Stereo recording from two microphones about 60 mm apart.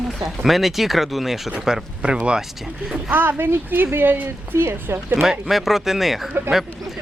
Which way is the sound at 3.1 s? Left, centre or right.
Right.